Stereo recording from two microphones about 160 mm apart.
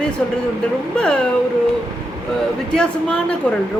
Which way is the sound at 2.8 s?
5° left (ahead or behind).